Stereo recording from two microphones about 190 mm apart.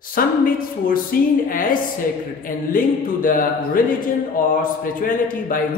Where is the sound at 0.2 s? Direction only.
50° left (ahead or behind).